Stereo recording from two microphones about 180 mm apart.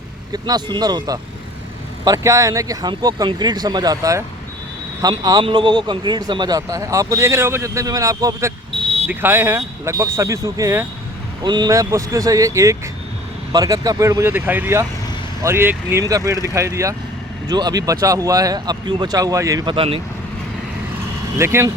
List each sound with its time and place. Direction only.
0.4 s speech: 20° right (ahead or behind)
21.3 s speech: 15° right (ahead or behind)